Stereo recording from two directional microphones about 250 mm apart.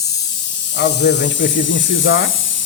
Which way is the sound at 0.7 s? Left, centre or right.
Left.